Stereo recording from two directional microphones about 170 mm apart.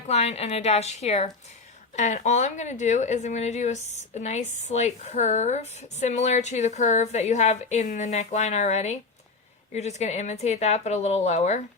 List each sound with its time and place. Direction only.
0.1 s a woman's voice: 40° left (ahead or behind)